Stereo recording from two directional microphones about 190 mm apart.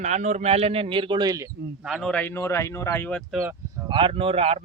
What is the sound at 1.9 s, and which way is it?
A man's voice, centre (ahead or behind).